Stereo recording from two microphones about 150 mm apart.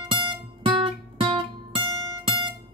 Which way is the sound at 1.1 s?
35° right (ahead or behind).